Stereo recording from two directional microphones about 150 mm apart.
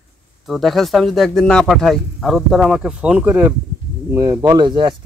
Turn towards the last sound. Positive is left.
turn(degrees=-30)  # may be behind; listen again after turning